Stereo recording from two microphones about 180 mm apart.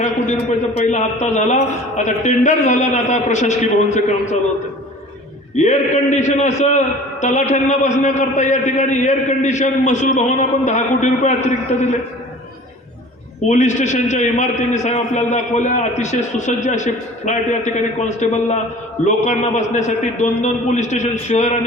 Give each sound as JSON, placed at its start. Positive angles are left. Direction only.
{"t": 0.9, "sound": "a man's voice", "side_deg": 40}
{"t": 5.5, "sound": "a man's voice", "side_deg": 40}
{"t": 13.5, "sound": "a man's voice", "side_deg": 40}